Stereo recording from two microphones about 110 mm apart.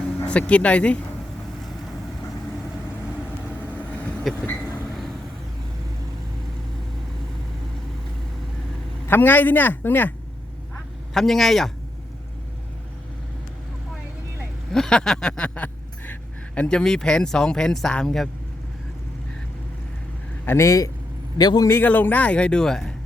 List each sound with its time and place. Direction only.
0.3 s speech: 10° left (ahead or behind)
3.1 s vehicle: 10° right (ahead or behind)
4.3 s speech: centre (ahead or behind)
4.9 s vehicle: centre (ahead or behind)
9.0 s speech: 20° left (ahead or behind)
11.1 s speech: centre (ahead or behind)
14.7 s a sound: 5° left (ahead or behind)
16.6 s speech: 10° left (ahead or behind)
20.4 s a man's voice: 20° left (ahead or behind)
21.7 s speech: 15° left (ahead or behind)